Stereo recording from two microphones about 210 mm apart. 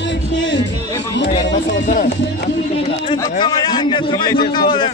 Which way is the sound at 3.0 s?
20° left (ahead or behind).